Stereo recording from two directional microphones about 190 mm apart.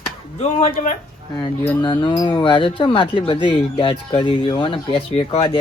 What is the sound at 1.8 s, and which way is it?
Speech, 25° left (ahead or behind).